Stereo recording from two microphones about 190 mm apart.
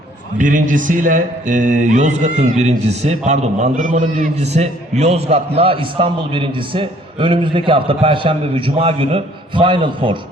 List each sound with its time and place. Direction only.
0.3 s speech: 40° right (ahead or behind); by 10.2 s 25° right (ahead or behind)